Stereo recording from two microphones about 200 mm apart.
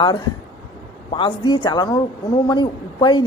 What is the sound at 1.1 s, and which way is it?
A woman's voice, 25° left (ahead or behind).